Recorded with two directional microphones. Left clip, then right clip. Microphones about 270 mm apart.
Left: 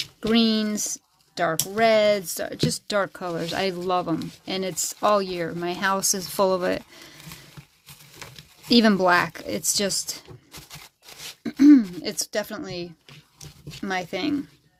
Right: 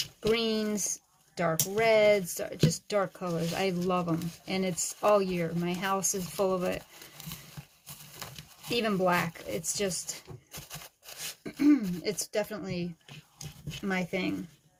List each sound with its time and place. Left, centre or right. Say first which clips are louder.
0.2 s speech: left 6 dB; left
8.7 s speech: left 9 dB; left
10.5 s a sound: left 2 dB; centre
11.4 s speech: left 10 dB; left
13.8 s speech: left 5 dB; left